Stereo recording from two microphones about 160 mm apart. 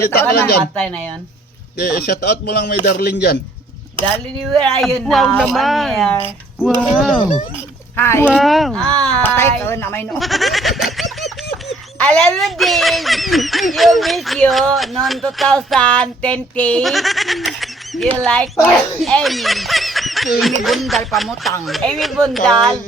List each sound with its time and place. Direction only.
0.0 s speech: 90° left
0.8 s speech: 10° left (ahead or behind)
1.8 s speech: 80° left
2.8 s speech: 75° left (ahead or behind)
4.4 s speech: 5° left (ahead or behind)
7.9 s speech: 15° left (ahead or behind)
8.2 s speech: centre (ahead or behind); by 10.1 s 15° left (ahead or behind)
10.2 s goat: centre (ahead or behind)
11.7 s speech: 5° left (ahead or behind)